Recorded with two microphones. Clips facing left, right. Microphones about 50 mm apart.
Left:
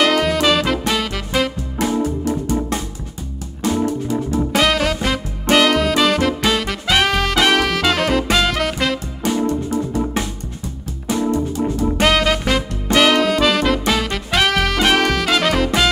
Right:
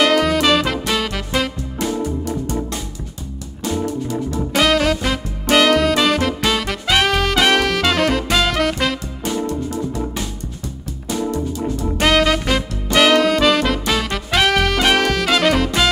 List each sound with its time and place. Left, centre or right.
0.0 s music: centre
1.8 s music: centre
4.4 s music: centre
11.1 s music: left
12.0 s music: centre